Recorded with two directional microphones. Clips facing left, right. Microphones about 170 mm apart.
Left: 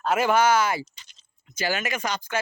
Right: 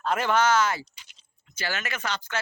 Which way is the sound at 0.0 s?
10° left (ahead or behind).